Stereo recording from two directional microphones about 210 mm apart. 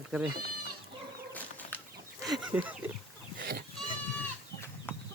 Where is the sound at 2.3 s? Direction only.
5° right (ahead or behind).